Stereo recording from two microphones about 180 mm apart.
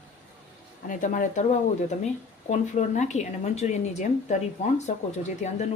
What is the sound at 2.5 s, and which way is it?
Speech, 40° left (ahead or behind).